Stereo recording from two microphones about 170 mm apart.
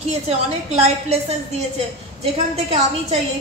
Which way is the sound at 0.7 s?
40° right (ahead or behind).